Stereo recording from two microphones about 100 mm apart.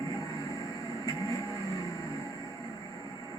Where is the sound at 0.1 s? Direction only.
40° left (ahead or behind).